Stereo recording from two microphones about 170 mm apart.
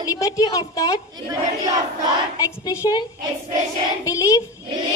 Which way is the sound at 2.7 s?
20° left (ahead or behind).